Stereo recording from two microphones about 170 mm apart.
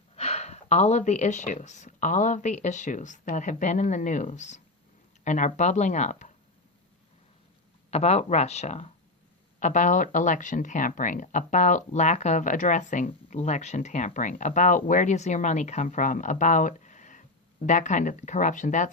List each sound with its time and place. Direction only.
0.2 s speech: 40° left (ahead or behind)
7.9 s speech: 40° left (ahead or behind)